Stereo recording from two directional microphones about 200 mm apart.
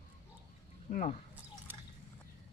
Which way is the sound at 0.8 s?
35° left (ahead or behind).